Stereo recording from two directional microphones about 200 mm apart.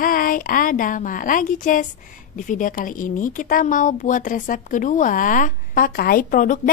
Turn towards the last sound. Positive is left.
turn(degrees=40)  # may be behind; listen again after turning